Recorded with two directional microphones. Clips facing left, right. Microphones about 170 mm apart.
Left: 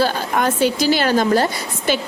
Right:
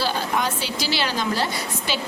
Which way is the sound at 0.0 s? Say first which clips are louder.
Left 5 dB; 50° left (ahead or behind).